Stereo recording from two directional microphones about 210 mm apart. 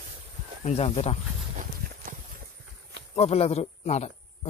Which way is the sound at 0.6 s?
30° left (ahead or behind).